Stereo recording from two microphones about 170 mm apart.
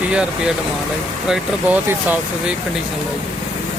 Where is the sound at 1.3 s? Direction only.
10° right (ahead or behind).